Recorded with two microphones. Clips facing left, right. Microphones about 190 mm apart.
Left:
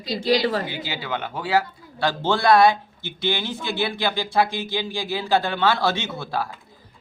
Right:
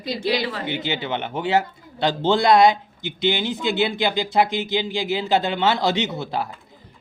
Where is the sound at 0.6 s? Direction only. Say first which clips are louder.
Right 4 dB; 25° right (ahead or behind).